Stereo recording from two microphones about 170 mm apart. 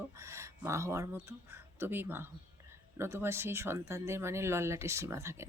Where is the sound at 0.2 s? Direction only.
15° right (ahead or behind).